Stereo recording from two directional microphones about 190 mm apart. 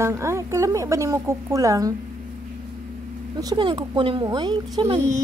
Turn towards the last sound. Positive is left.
turn(degrees=-30)  # may be behind; listen again after turning